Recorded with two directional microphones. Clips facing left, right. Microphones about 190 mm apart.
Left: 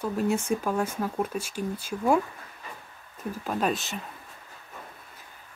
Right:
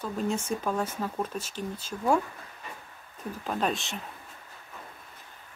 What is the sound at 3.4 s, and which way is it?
Speech, 5° left (ahead or behind).